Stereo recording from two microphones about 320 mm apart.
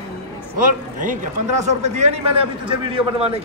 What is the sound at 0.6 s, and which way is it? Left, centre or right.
A man's voice, right.